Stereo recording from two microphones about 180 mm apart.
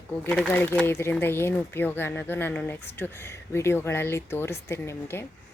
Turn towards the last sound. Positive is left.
turn(degrees=15)  # may be behind; listen again after turning